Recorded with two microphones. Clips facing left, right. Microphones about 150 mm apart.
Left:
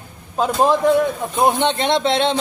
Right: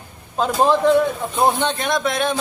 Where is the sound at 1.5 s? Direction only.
25° left (ahead or behind).